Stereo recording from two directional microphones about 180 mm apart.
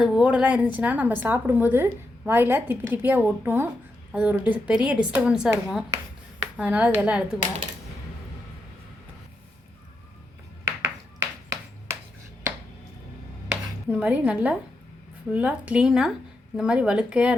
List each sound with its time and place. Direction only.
0.0 s a woman's voice: 5° right (ahead or behind)
10.8 s a sound: 15° right (ahead or behind)
13.5 s chopping: 10° right (ahead or behind)
15.3 s a woman's voice: 5° right (ahead or behind)